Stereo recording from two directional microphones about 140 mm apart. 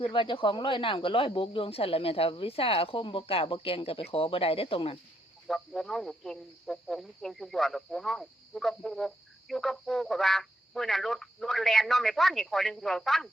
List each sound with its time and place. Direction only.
0.0 s speech: 35° left (ahead or behind)
5.5 s speech: centre (ahead or behind)